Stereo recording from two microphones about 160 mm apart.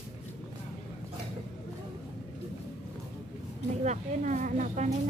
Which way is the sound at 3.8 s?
50° right (ahead or behind).